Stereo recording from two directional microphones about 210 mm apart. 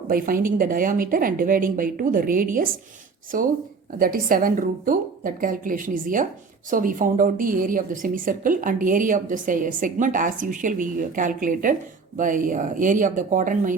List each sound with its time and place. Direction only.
0.1 s a woman's voice: 40° right (ahead or behind)